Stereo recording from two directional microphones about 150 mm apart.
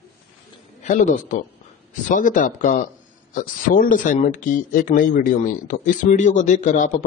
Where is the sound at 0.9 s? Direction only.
55° left (ahead or behind).